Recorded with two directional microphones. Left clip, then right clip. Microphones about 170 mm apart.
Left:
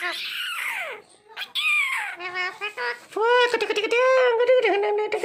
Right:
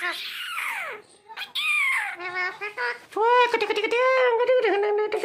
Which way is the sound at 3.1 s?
15° left (ahead or behind).